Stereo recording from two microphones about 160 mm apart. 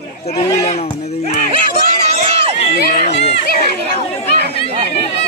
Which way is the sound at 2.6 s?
50° left (ahead or behind).